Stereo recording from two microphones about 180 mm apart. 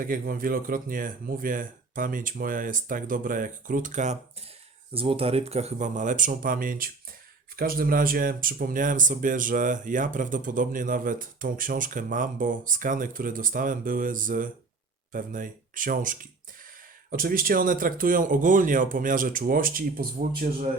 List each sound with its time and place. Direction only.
0.0 s speech: 50° right (ahead or behind)